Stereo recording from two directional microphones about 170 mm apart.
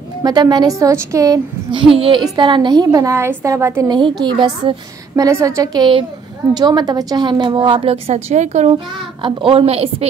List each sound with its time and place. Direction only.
0.2 s a woman's voice: 25° right (ahead or behind)